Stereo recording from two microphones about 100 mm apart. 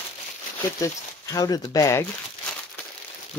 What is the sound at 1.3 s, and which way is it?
Speech, 40° left (ahead or behind).